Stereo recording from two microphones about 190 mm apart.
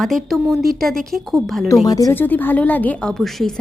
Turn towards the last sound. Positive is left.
turn(degrees=0)  # may be behind; listen again after turning